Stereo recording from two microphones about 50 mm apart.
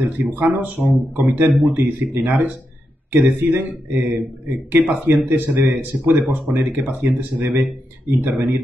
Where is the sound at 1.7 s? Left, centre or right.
Right.